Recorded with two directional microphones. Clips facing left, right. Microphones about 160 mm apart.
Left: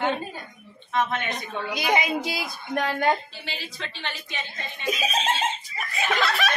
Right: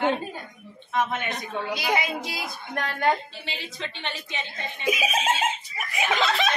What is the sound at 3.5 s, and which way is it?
Speech, 25° right (ahead or behind).